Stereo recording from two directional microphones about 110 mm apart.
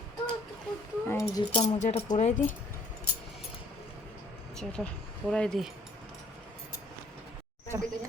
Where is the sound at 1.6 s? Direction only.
90° left.